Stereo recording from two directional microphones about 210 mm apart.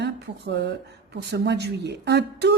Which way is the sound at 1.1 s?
50° right (ahead or behind).